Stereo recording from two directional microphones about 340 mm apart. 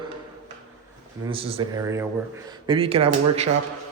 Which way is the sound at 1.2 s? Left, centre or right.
Centre.